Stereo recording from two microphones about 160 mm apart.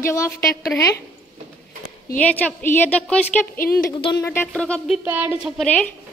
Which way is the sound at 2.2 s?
10° left (ahead or behind).